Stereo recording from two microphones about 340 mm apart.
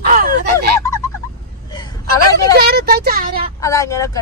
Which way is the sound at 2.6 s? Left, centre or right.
Right.